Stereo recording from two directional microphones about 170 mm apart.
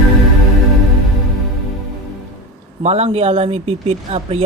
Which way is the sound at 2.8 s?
40° right (ahead or behind).